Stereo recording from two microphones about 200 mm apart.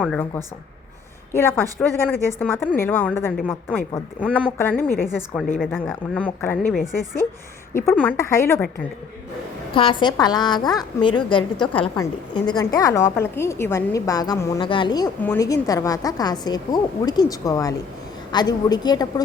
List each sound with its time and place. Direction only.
0.0 s a woman's voice: 5° left (ahead or behind)
1.3 s a woman's voice: 10° left (ahead or behind)
6.1 s a woman's voice: 10° left (ahead or behind)
9.7 s a woman's voice: 25° left (ahead or behind)